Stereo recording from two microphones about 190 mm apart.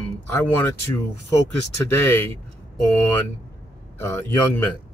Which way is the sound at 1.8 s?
10° left (ahead or behind).